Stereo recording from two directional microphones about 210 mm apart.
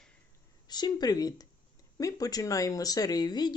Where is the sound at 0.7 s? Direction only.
20° left (ahead or behind).